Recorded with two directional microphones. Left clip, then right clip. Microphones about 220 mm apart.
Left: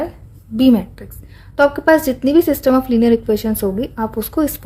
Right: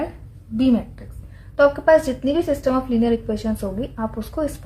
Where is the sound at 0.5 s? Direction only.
50° left (ahead or behind).